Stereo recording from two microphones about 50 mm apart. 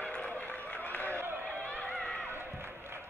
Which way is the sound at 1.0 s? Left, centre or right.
Right.